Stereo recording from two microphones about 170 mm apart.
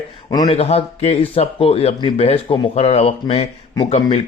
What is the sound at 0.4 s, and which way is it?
Speech, 35° left (ahead or behind).